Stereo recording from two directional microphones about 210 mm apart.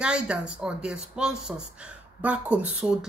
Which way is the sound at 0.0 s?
5° right (ahead or behind).